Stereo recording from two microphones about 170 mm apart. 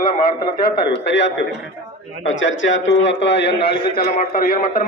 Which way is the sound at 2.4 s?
90° left.